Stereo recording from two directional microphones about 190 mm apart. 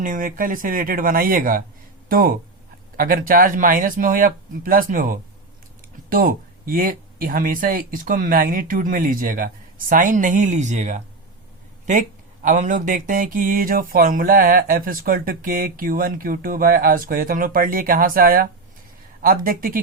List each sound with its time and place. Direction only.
0.0 s speech: 45° right (ahead or behind)